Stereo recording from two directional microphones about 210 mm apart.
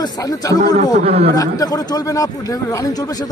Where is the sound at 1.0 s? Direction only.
30° right (ahead or behind).